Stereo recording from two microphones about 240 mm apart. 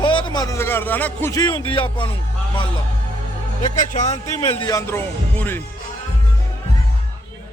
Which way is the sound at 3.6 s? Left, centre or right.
Left.